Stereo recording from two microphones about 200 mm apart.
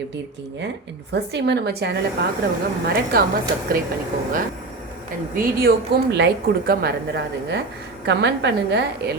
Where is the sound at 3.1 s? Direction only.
45° right (ahead or behind).